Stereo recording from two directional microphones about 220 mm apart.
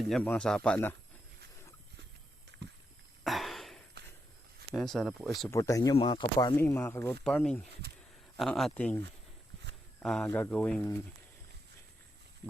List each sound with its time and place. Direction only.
0.1 s speech: 5° left (ahead or behind)
2.5 s rowboat: 50° right (ahead or behind)
3.2 s a sound: centre (ahead or behind)
4.7 s speech: centre (ahead or behind)
5.5 s speech: 15° left (ahead or behind)
6.6 s speech: 10° left (ahead or behind)